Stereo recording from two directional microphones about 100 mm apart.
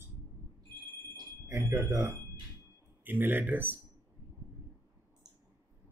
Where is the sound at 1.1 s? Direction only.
30° right (ahead or behind).